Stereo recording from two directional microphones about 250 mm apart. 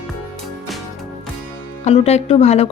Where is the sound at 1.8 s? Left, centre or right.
Left.